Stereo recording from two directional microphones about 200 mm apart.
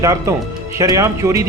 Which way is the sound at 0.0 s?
15° right (ahead or behind).